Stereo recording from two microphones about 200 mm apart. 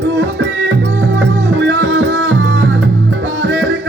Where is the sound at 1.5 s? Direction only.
60° right (ahead or behind).